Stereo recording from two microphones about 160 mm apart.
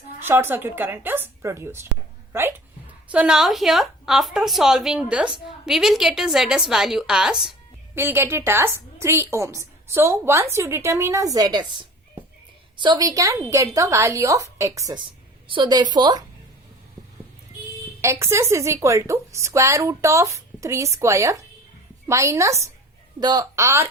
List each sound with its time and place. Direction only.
0.2 s a woman's voice: 15° right (ahead or behind)
7.9 s a woman's voice: 15° right (ahead or behind)
18.0 s a woman's voice: 15° right (ahead or behind)